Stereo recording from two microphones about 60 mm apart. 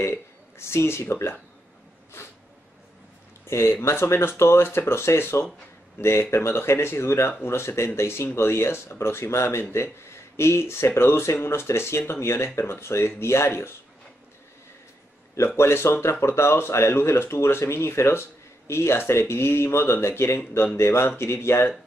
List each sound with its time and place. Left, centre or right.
0.0 s speech: left
3.4 s speech: left
15.3 s speech: left